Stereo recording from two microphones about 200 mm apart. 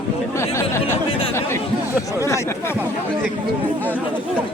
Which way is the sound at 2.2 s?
15° left (ahead or behind).